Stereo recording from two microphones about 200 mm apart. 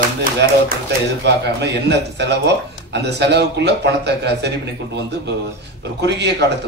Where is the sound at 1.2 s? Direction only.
60° right (ahead or behind).